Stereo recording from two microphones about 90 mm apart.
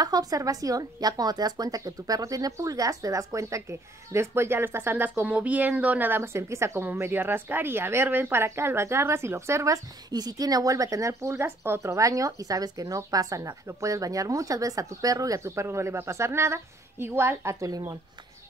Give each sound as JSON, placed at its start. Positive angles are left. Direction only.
{"t": 0.0, "sound": "speech", "side_deg": -45}
{"t": 10.1, "sound": "speech", "side_deg": -45}